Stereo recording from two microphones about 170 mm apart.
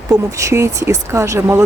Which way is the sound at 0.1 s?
20° right (ahead or behind).